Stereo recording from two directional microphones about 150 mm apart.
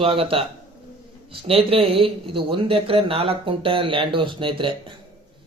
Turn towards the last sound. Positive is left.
turn(degrees=-35)  # may be behind; listen again after turning